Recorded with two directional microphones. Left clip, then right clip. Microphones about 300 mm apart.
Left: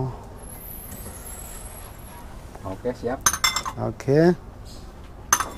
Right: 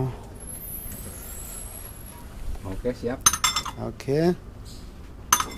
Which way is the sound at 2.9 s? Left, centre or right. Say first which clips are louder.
Even; right.